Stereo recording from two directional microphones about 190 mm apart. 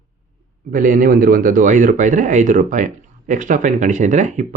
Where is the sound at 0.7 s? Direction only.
45° right (ahead or behind).